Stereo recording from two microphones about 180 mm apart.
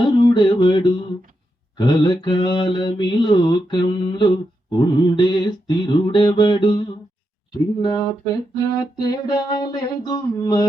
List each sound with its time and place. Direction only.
0.0 s mantra: 25° left (ahead or behind)